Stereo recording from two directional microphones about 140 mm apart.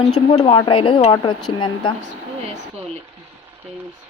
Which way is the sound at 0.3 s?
40° left (ahead or behind).